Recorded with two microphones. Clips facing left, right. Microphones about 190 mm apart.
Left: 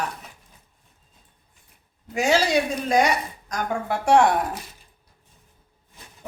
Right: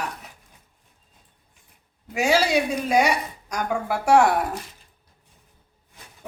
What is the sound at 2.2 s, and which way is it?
A woman's voice, 10° right (ahead or behind).